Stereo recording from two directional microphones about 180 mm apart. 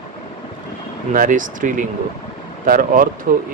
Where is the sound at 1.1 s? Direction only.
45° right (ahead or behind).